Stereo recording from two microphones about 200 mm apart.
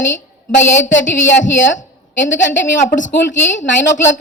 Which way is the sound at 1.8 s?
40° left (ahead or behind).